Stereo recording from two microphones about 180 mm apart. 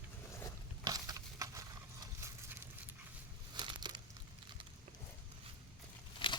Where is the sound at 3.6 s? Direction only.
25° right (ahead or behind).